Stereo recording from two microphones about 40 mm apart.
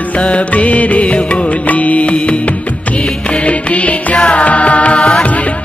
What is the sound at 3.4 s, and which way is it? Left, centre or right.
Music, left.